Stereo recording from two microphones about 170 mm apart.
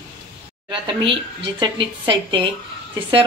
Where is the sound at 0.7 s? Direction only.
30° right (ahead or behind).